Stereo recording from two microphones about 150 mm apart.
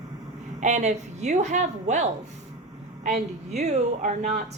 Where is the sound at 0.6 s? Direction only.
50° right (ahead or behind).